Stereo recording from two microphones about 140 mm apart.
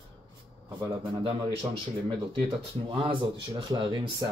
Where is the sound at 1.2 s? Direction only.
35° right (ahead or behind).